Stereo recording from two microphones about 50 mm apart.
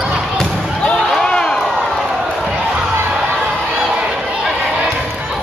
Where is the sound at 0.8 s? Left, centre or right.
Centre.